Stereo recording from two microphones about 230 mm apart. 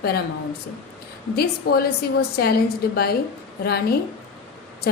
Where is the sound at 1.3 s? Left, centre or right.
Left.